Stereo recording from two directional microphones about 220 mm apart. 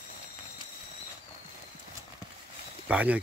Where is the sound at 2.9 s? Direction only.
5° right (ahead or behind).